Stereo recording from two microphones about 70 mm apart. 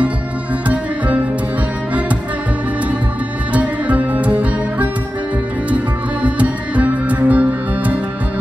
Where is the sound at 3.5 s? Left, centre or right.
Right.